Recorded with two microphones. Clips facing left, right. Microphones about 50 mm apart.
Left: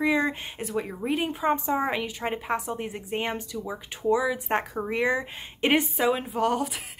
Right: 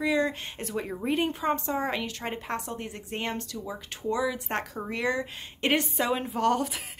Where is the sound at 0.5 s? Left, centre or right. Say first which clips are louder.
Left 2 dB; centre.